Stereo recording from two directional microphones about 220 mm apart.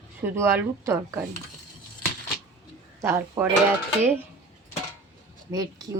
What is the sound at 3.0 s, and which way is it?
Speech, 10° right (ahead or behind).